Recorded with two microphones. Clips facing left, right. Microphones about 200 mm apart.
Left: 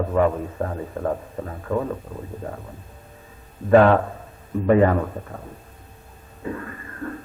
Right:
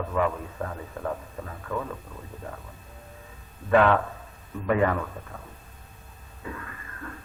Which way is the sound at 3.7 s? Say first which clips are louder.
Left 6 dB; 40° left (ahead or behind).